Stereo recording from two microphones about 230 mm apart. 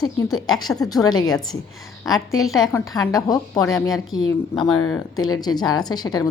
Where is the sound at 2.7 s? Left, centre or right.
Centre.